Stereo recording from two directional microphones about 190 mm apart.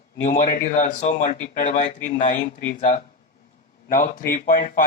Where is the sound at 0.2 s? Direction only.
45° left (ahead or behind).